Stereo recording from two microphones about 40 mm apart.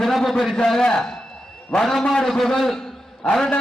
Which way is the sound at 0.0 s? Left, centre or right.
Centre.